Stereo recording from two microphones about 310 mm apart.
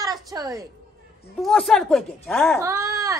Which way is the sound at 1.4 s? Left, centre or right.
Centre.